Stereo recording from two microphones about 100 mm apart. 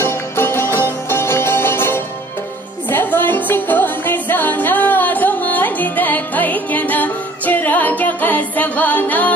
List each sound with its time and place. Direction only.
0.0 s music: 25° left (ahead or behind)